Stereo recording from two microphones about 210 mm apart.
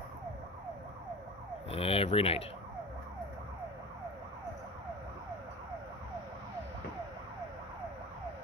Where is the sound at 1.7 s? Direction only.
25° left (ahead or behind).